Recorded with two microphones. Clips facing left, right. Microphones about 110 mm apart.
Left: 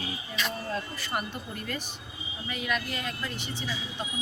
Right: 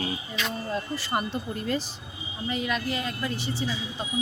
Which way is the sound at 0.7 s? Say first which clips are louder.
Right 4 dB; 25° right (ahead or behind).